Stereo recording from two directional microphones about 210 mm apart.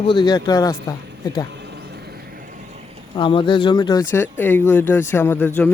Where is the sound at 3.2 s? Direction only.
25° left (ahead or behind).